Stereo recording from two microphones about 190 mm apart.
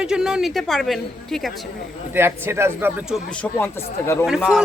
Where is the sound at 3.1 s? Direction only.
5° left (ahead or behind).